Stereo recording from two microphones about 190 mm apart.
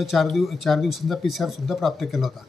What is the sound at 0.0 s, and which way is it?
Speech, centre (ahead or behind).